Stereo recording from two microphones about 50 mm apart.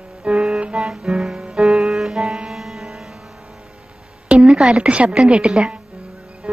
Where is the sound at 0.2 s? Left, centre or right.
Right.